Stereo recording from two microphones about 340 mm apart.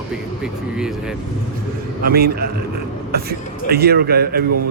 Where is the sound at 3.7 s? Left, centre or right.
Right.